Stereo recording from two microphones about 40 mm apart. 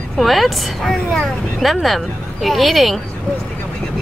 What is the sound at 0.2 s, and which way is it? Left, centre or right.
Speech, centre.